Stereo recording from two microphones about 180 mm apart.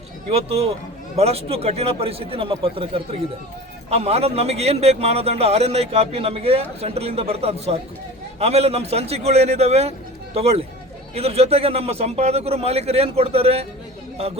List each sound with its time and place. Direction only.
0.3 s a man's voice: 35° right (ahead or behind)
11.1 s a man's voice: 35° right (ahead or behind)